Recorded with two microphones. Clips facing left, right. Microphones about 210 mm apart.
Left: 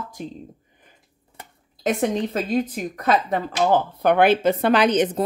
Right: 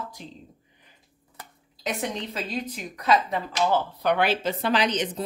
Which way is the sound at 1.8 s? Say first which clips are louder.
Left 8 dB; 50° left (ahead or behind).